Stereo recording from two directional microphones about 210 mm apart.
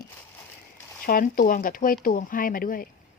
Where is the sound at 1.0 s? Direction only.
45° left (ahead or behind).